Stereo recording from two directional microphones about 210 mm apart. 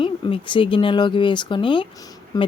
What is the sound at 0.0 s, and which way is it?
Speech, 25° left (ahead or behind).